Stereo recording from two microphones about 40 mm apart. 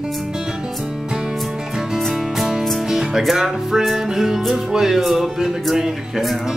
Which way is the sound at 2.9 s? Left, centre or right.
Centre.